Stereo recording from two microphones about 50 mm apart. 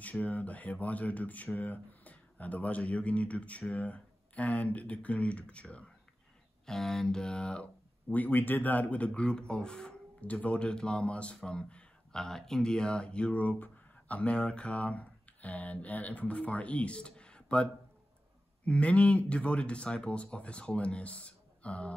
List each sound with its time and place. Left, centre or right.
0.0 s speech: left
6.6 s speech: centre
8.1 s speech: left; by 9.9 s centre
10.2 s speech: left
18.7 s speech: left